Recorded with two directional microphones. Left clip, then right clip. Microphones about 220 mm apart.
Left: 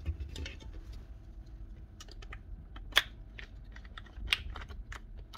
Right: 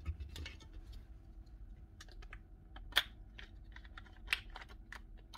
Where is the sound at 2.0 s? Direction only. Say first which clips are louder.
Left 6 dB; 5° left (ahead or behind).